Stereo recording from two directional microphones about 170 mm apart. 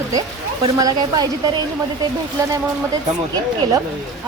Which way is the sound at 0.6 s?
25° right (ahead or behind).